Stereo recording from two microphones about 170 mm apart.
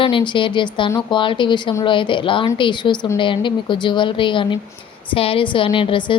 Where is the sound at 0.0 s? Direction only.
30° left (ahead or behind).